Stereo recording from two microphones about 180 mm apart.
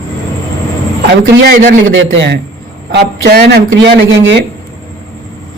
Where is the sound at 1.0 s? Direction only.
60° right (ahead or behind).